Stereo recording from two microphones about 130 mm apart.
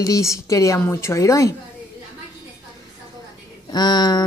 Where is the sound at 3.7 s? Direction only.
35° left (ahead or behind).